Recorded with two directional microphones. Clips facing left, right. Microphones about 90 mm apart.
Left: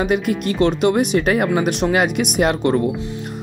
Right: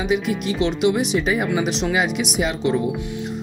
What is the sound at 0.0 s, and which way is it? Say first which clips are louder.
Speech: left 3 dB; 50° left (ahead or behind).